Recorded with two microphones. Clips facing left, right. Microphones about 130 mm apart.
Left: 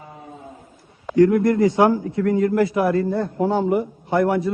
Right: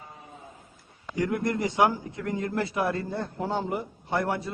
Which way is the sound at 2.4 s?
25° right (ahead or behind).